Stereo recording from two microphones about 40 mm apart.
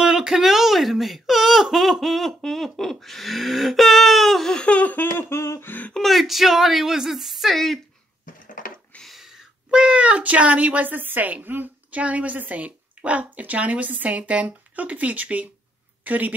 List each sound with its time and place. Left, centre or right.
0.0 s speech: centre
4.6 s laughter: left
4.9 s a sound: left
6.0 s speech: centre
7.5 s speech: centre
9.2 s a sound: centre
9.7 s a woman's voice: right
11.9 s a woman's voice: right
16.0 s a woman's voice: right